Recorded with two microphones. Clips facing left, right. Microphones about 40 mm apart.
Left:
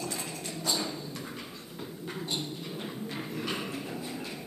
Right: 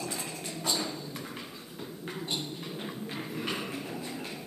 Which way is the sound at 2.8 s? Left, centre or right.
Centre.